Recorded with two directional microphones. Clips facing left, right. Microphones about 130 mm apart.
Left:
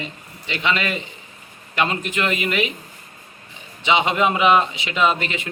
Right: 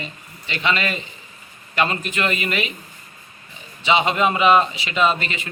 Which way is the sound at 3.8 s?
15° left (ahead or behind).